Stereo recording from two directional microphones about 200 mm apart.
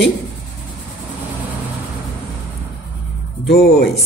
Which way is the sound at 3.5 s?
50° left (ahead or behind).